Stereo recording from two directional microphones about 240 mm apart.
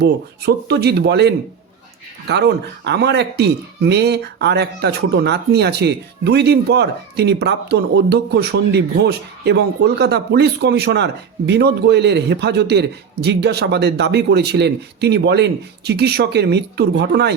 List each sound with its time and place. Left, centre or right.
0.0 s speech: right